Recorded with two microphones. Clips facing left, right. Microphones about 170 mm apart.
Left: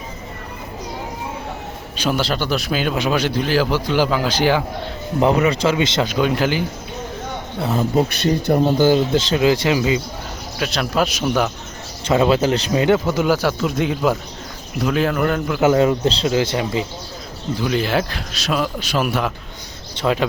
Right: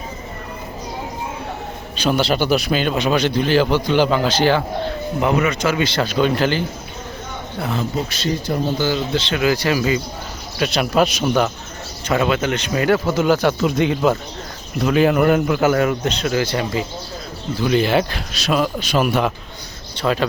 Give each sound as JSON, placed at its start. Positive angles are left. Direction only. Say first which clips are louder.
{"t": 2.0, "sound": "a man's voice", "louder": "right 3 dB", "side_deg": 5}
{"t": 5.2, "sound": "speech", "louder": "left 3 dB", "side_deg": 30}
{"t": 5.7, "sound": "speech", "louder": "even", "side_deg": 20}
{"t": 7.8, "sound": "speech", "louder": "left 5 dB", "side_deg": 55}
{"t": 9.3, "sound": "speech", "louder": "left 1 dB", "side_deg": 25}
{"t": 10.6, "sound": "a man's voice", "louder": "right 3 dB", "side_deg": -5}
{"t": 12.0, "sound": "speech", "louder": "left 3 dB", "side_deg": 25}
{"t": 12.7, "sound": "speech", "louder": "right 1 dB", "side_deg": 20}
{"t": 13.5, "sound": "a man's voice", "louder": "right 2 dB", "side_deg": -5}
{"t": 15.6, "sound": "speech", "louder": "left 2 dB", "side_deg": 25}
{"t": 17.6, "sound": "a man's voice", "louder": "right 3 dB", "side_deg": 0}
{"t": 20.0, "sound": "speech", "louder": "even", "side_deg": 15}